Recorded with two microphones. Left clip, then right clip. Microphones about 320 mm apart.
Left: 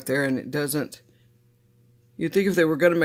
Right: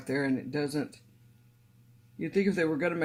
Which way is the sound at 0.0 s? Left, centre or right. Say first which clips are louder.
Left 6 dB; left.